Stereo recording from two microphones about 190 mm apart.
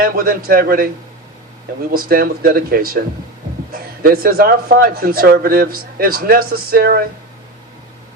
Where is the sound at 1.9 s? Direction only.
50° right (ahead or behind).